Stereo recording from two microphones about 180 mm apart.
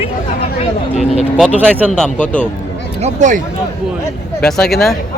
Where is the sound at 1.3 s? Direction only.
Centre (ahead or behind).